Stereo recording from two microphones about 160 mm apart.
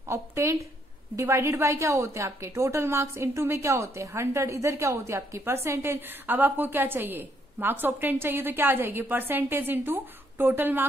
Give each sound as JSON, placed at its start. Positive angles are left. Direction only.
{"t": 0.1, "sound": "a woman's voice", "side_deg": -15}